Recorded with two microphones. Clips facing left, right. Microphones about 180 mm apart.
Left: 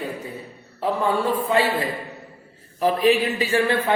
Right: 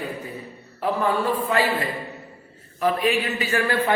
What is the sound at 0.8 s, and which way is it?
Speech, 25° left (ahead or behind).